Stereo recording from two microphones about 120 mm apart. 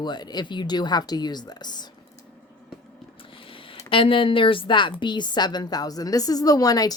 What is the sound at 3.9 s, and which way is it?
A woman's voice, 45° left (ahead or behind).